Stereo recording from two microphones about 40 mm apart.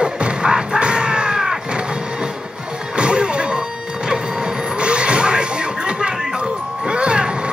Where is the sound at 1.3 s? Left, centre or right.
Centre.